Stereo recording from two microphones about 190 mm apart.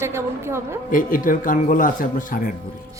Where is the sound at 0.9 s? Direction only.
45° left (ahead or behind).